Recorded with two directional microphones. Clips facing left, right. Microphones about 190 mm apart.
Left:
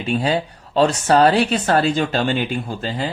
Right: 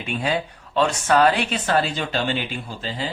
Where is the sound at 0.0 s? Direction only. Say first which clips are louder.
Left 5 dB; 35° left (ahead or behind); by 2.9 s 50° left (ahead or behind).